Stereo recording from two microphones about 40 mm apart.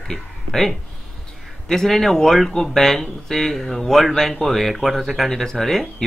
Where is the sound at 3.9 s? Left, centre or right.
Centre.